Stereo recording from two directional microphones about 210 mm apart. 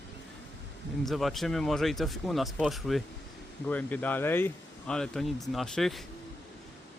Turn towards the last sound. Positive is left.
turn(degrees=0)  # may be behind; listen again after turning